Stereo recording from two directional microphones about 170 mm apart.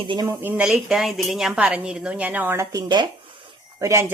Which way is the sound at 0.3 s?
10° right (ahead or behind).